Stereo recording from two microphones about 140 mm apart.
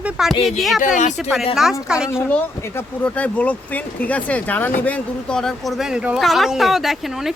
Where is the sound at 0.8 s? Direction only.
65° left (ahead or behind).